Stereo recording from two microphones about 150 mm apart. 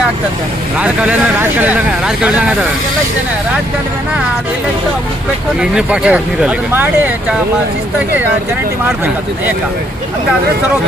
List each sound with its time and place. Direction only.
0.8 s speech: 10° right (ahead or behind)
5.5 s speech: 5° right (ahead or behind)